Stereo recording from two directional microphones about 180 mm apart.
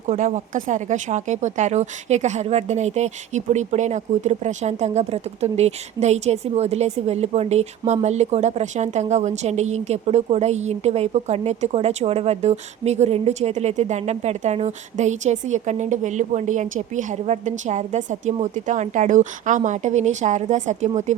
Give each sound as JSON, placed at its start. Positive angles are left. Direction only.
{"t": 0.1, "sound": "speech", "side_deg": -40}